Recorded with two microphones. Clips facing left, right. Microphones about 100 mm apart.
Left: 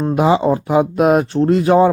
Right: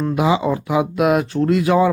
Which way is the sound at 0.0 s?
40° left (ahead or behind).